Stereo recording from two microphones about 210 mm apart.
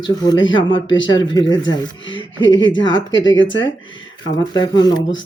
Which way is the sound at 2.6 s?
65° left (ahead or behind).